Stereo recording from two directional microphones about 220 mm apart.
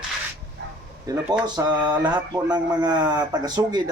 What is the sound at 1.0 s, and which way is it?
Speech, 15° right (ahead or behind).